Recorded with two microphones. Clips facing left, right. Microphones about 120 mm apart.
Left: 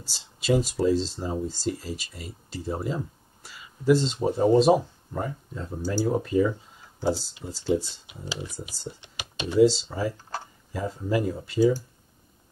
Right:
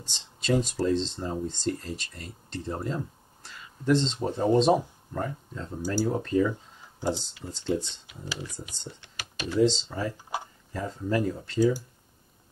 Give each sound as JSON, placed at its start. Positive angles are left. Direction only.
{"t": 0.0, "sound": "speech", "side_deg": 5}
{"t": 8.1, "sound": "speech", "side_deg": 20}
{"t": 9.0, "sound": "computer keyboard", "side_deg": 20}
{"t": 9.6, "sound": "speech", "side_deg": 5}
{"t": 10.1, "sound": "a sound", "side_deg": -15}
{"t": 10.7, "sound": "speech", "side_deg": 10}